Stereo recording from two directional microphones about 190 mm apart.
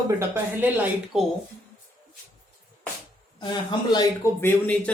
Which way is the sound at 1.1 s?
Centre (ahead or behind).